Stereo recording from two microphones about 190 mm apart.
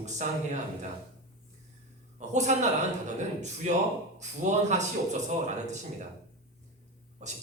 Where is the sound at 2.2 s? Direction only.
40° right (ahead or behind).